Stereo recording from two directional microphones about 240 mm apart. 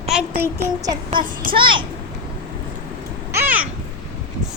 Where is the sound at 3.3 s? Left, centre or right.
Centre.